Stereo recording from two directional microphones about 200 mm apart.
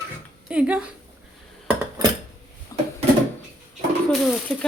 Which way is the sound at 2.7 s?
15° left (ahead or behind).